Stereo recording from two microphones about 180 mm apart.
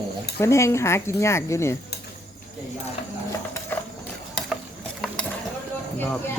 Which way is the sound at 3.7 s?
10° left (ahead or behind).